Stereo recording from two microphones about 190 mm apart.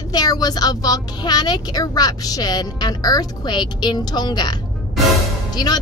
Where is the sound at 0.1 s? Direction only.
20° left (ahead or behind).